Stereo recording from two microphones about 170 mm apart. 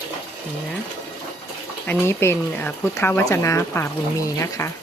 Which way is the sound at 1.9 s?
15° left (ahead or behind).